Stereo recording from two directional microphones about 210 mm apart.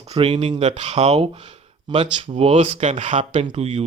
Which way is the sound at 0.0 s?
30° right (ahead or behind).